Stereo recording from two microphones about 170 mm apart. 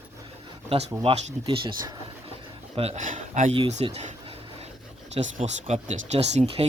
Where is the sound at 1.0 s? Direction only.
35° right (ahead or behind).